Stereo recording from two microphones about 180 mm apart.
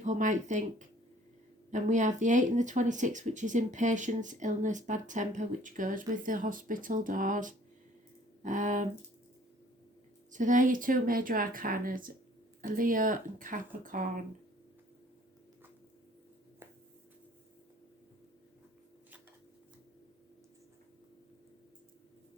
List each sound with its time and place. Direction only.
0.0 s speech: 45° right (ahead or behind)
10.3 s speech: 45° right (ahead or behind)